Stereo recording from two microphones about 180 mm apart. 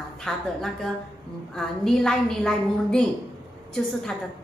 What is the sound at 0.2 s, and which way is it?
A woman's voice, 5° left (ahead or behind).